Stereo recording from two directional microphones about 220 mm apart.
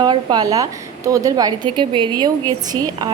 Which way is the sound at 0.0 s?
20° right (ahead or behind).